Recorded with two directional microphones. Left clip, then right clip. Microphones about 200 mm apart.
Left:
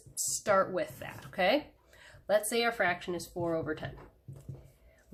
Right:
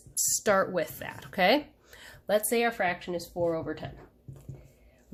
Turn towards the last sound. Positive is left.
turn(degrees=-10)  # may be behind; listen again after turning